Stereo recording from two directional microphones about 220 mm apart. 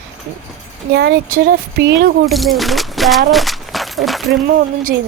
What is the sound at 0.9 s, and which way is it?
Speech, 50° right (ahead or behind).